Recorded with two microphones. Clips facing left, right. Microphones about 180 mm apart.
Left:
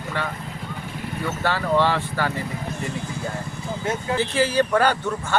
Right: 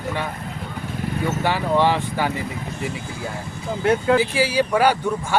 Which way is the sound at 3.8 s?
65° right (ahead or behind).